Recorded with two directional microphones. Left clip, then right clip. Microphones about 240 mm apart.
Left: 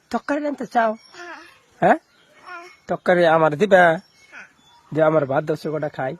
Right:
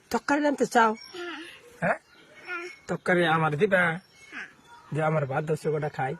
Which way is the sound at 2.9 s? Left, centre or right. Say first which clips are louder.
Left 8 dB; left.